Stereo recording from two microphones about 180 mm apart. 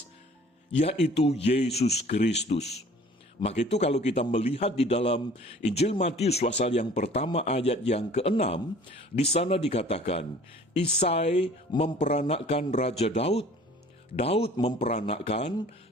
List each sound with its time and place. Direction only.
0.8 s a man's voice: 35° left (ahead or behind)